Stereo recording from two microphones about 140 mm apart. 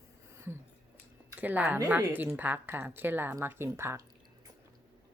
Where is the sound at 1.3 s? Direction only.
10° right (ahead or behind).